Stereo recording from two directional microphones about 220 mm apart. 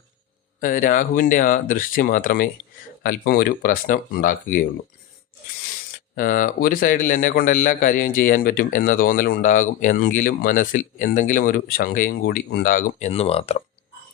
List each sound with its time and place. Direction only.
0.6 s a man's voice: 35° left (ahead or behind)
6.1 s a man's voice: 40° left (ahead or behind)